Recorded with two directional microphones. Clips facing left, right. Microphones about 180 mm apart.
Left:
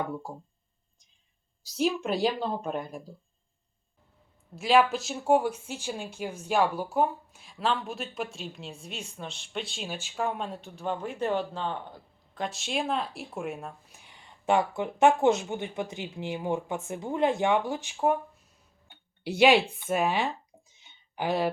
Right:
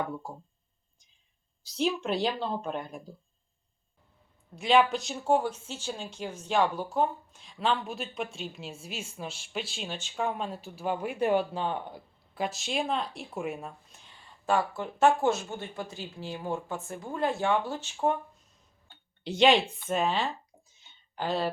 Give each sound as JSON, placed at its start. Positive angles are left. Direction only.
{"t": 1.7, "sound": "speech", "side_deg": 5}
{"t": 4.5, "sound": "speech", "side_deg": 0}
{"t": 13.9, "sound": "speech", "side_deg": 15}
{"t": 18.9, "sound": "a sound", "side_deg": 10}